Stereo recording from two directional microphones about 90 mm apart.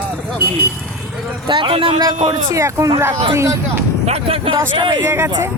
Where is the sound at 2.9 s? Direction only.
35° right (ahead or behind).